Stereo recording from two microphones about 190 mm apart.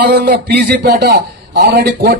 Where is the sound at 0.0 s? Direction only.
60° right (ahead or behind).